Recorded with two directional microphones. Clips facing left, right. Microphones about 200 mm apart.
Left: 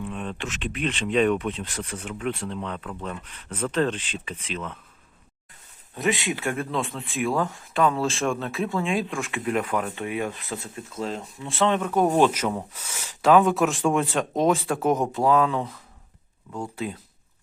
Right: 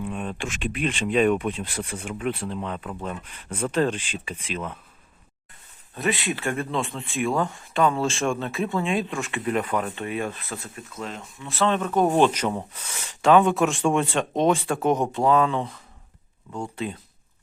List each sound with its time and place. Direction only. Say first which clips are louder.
0.0 s speech: right 2 dB; 10° right (ahead or behind)
5.9 s speech: left 1 dB; 15° left (ahead or behind)
11.7 s speech: right 1 dB; 10° left (ahead or behind)